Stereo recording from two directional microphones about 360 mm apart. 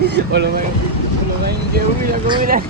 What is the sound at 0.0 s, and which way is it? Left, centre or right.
Speech, right.